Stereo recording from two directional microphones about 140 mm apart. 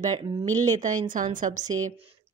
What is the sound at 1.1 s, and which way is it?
Speech, 70° right (ahead or behind).